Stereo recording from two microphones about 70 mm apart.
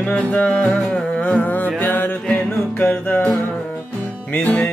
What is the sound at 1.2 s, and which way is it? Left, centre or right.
Music, left.